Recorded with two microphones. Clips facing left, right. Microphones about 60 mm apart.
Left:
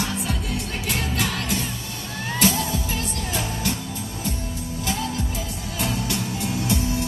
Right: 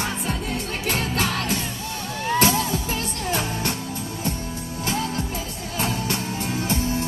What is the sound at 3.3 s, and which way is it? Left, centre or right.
Music, right.